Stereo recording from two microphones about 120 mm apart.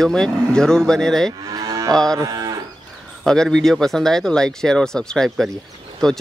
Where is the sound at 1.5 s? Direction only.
30° right (ahead or behind).